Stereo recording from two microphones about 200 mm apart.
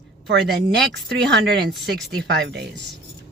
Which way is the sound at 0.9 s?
60° right (ahead or behind).